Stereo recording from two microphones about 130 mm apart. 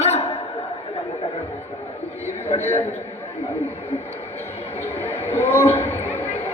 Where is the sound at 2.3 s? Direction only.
55° left (ahead or behind).